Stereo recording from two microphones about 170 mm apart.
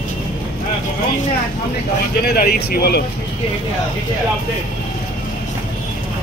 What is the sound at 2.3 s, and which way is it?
Speech, 65° left (ahead or behind).